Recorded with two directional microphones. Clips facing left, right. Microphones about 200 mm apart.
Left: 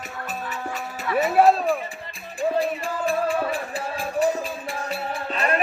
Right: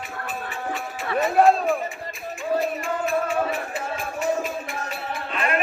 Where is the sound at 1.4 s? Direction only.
5° left (ahead or behind).